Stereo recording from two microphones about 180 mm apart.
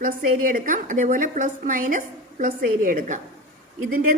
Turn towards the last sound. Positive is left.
turn(degrees=-55)  # may be behind; listen again after turning